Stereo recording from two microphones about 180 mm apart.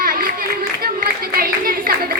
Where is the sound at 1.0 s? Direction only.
55° right (ahead or behind).